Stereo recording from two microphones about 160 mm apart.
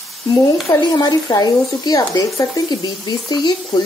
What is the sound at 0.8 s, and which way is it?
A woman's voice, 25° left (ahead or behind).